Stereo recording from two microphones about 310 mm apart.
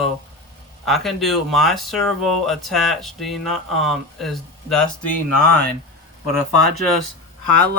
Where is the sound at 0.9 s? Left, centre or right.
Centre.